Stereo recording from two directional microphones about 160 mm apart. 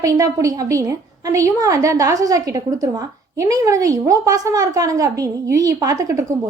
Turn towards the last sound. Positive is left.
turn(degrees=-20)  # may be behind; listen again after turning